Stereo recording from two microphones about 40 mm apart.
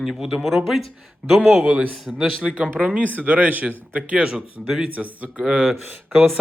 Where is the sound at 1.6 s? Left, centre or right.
Right.